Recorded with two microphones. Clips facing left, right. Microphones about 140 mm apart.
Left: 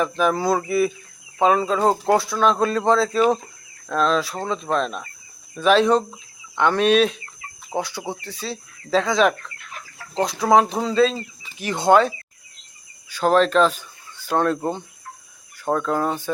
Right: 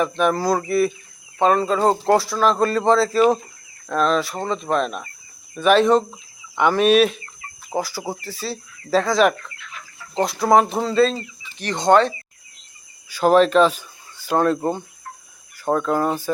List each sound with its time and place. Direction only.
0.0 s speech: centre (ahead or behind)
13.1 s speech: 5° right (ahead or behind)